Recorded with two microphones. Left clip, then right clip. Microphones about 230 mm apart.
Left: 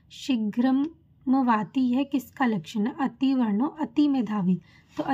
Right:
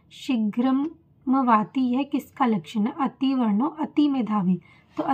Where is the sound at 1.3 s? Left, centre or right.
Left.